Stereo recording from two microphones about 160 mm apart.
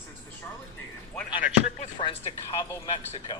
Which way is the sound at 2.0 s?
30° left (ahead or behind).